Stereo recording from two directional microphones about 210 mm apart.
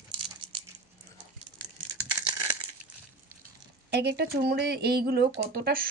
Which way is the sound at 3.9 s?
50° right (ahead or behind).